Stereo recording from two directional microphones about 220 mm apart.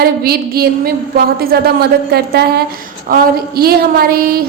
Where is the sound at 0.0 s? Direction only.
45° right (ahead or behind).